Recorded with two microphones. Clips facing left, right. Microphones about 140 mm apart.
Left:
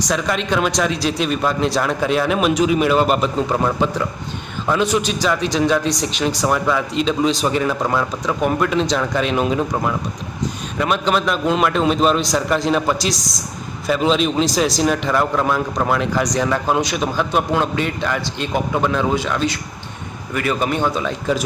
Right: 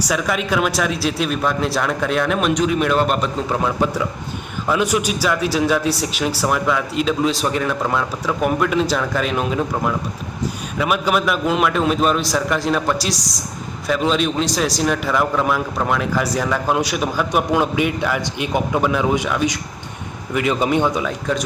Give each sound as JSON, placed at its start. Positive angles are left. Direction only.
{"t": 0.0, "sound": "a man's voice", "side_deg": -5}
{"t": 21.0, "sound": "a man's voice", "side_deg": 5}